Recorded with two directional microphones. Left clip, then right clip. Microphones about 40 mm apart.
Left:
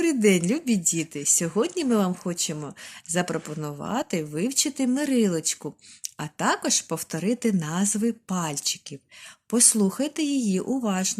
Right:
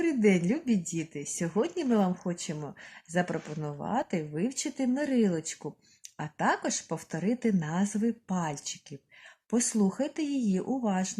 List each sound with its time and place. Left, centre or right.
0.0 s speech: right